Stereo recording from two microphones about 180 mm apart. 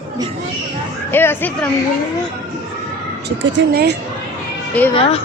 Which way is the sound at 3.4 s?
75° right (ahead or behind).